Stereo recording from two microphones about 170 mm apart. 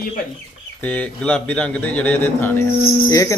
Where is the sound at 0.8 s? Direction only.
10° left (ahead or behind).